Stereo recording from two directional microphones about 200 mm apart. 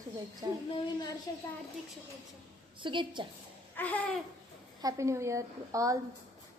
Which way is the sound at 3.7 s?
10° left (ahead or behind).